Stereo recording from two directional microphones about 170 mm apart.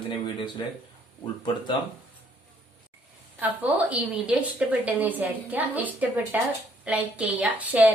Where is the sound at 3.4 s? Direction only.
10° right (ahead or behind).